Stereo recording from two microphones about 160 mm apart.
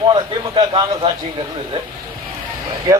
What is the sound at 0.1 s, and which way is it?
A man's voice, 30° right (ahead or behind).